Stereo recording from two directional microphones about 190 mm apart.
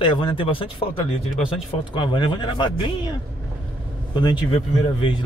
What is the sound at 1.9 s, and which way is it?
A man's voice, 25° left (ahead or behind).